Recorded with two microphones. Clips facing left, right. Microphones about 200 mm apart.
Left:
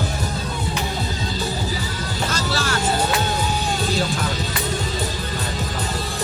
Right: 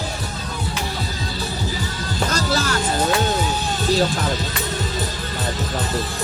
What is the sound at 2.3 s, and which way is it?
Speech, 40° right (ahead or behind).